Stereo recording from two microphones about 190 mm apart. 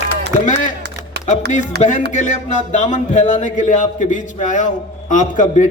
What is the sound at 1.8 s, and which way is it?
A man's voice, 40° left (ahead or behind).